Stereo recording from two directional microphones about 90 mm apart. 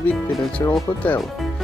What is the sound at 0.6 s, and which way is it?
Speech, 30° left (ahead or behind).